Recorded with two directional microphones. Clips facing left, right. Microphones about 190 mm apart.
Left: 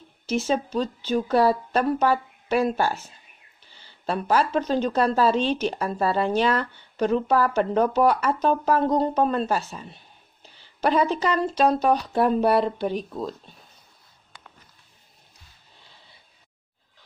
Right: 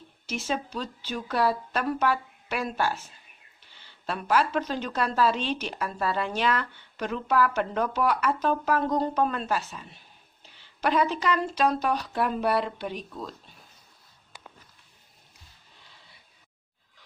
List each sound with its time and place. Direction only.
0.3 s speech: 35° left (ahead or behind)